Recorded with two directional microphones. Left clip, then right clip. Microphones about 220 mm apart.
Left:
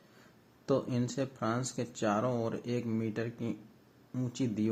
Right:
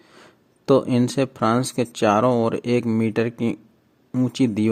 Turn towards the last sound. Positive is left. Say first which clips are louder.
# right 14 dB
turn(degrees=-45)  # may be behind; listen again after turning